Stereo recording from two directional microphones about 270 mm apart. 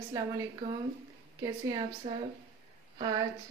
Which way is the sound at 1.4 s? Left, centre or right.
Centre.